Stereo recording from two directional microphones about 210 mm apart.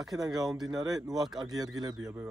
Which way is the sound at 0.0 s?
Centre (ahead or behind).